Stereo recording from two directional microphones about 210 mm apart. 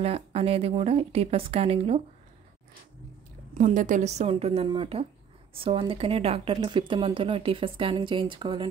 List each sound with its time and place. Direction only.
0.0 s speech: 30° right (ahead or behind)
3.5 s a woman's voice: 35° right (ahead or behind)